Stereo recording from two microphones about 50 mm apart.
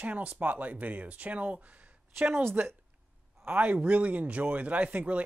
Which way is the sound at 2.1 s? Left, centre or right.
Right.